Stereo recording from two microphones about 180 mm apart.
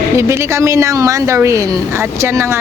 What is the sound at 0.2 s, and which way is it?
A woman's voice, 15° right (ahead or behind).